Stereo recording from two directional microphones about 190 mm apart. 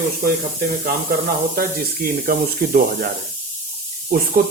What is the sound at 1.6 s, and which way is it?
Speech, 50° right (ahead or behind).